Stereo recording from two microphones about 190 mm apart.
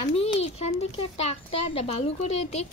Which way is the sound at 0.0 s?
30° left (ahead or behind).